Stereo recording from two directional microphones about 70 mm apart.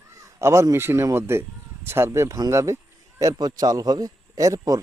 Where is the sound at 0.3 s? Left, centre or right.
Right.